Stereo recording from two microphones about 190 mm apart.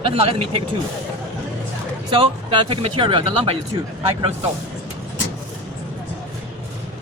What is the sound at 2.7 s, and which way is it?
Speech, 25° right (ahead or behind).